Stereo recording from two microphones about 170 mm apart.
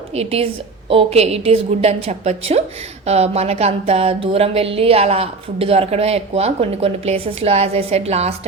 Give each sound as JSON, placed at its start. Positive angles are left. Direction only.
{"t": 0.1, "sound": "speech", "side_deg": -35}